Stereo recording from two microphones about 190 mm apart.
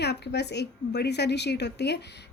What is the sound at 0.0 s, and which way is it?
A woman's voice, 60° left (ahead or behind).